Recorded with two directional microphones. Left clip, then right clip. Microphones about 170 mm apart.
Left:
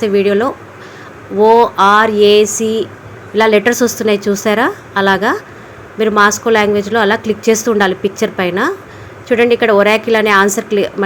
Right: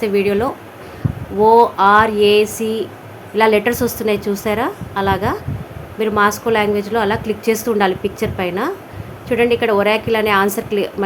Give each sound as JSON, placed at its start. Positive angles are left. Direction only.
{"t": 0.0, "sound": "a woman's voice", "side_deg": 20}